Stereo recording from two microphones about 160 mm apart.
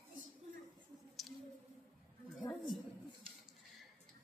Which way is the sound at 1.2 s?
Centre (ahead or behind).